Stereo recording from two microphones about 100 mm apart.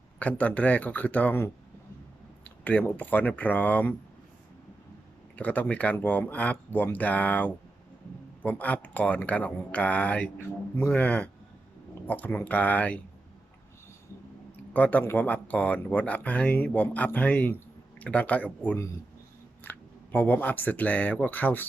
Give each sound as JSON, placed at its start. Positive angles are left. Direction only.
{"t": 0.2, "sound": "speech", "side_deg": 15}
{"t": 5.4, "sound": "speech", "side_deg": 15}
{"t": 14.7, "sound": "speech", "side_deg": 15}
{"t": 19.6, "sound": "a sound", "side_deg": 20}
{"t": 20.1, "sound": "speech", "side_deg": 15}